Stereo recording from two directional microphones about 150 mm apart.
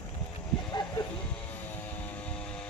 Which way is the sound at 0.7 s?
30° left (ahead or behind).